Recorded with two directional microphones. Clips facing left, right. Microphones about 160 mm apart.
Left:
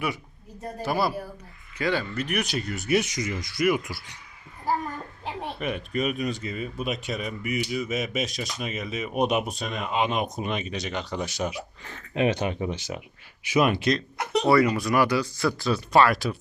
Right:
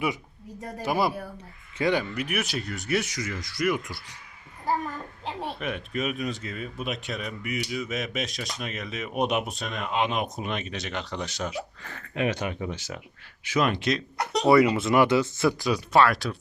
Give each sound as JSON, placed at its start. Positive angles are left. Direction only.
{"t": 0.8, "sound": "speech", "side_deg": -15}
{"t": 3.0, "sound": "speech", "side_deg": 20}
{"t": 5.2, "sound": "speech", "side_deg": 0}
{"t": 12.1, "sound": "speech", "side_deg": 25}
{"t": 14.4, "sound": "speech", "side_deg": -20}
{"t": 15.9, "sound": "speech", "side_deg": 0}